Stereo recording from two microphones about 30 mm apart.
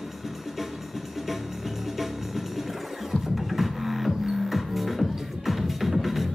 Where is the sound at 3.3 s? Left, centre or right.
Centre.